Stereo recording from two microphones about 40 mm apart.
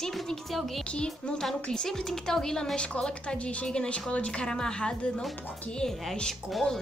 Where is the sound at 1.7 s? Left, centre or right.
Centre.